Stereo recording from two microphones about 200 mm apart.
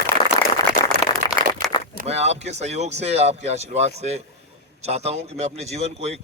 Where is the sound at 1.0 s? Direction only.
20° left (ahead or behind).